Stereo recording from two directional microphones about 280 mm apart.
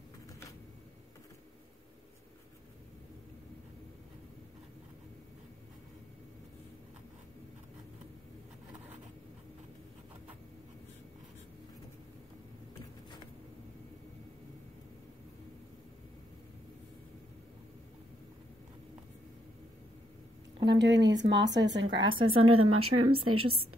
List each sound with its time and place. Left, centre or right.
20.6 s speech: right